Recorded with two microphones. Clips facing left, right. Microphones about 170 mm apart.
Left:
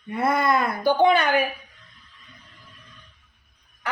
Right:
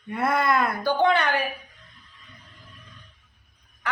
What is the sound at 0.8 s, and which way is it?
Speech, 10° left (ahead or behind).